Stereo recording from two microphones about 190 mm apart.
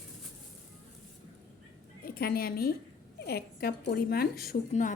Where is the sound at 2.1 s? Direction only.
55° left (ahead or behind).